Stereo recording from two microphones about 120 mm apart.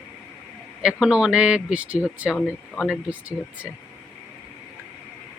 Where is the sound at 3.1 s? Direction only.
10° right (ahead or behind).